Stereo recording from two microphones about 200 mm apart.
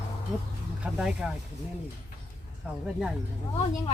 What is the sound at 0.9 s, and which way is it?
Speech, 5° right (ahead or behind).